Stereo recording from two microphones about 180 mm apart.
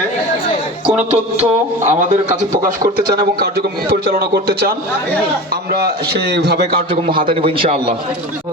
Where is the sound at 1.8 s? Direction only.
45° right (ahead or behind).